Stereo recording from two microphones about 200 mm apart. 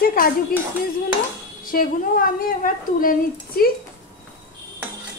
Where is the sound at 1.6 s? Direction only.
45° left (ahead or behind).